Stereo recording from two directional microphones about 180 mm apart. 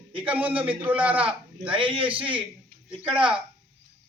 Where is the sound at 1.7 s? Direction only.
30° right (ahead or behind).